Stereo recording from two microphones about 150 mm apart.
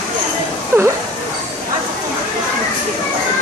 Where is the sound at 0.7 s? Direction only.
15° right (ahead or behind).